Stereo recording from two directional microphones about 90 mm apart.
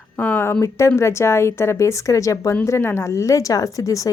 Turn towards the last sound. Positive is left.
turn(degrees=40)  # may be behind; listen again after turning